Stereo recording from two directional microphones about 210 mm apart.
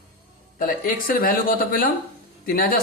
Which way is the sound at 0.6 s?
45° left (ahead or behind).